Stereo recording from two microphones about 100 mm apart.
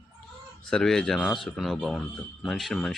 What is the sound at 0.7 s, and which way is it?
Speech, 5° left (ahead or behind).